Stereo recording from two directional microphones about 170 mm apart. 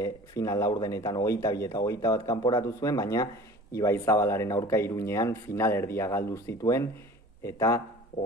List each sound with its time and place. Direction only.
0.0 s speech: 20° left (ahead or behind)